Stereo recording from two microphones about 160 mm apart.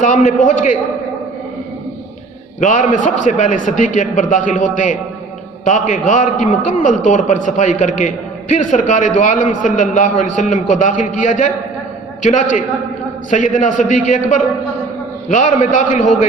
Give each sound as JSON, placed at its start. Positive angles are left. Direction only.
{"t": 0.0, "sound": "a man's voice", "side_deg": 50}
{"t": 2.6, "sound": "a man's voice", "side_deg": 50}